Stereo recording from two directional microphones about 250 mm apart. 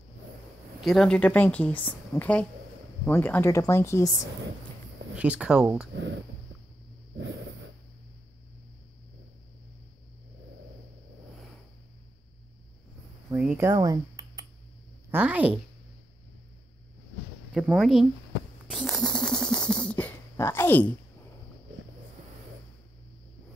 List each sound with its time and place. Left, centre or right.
0.7 s a woman's voice: centre
5.1 s a woman's voice: centre
13.3 s a sound: centre
15.0 s a woman's voice: centre
17.6 s a woman's voice: centre
18.7 s a sound: centre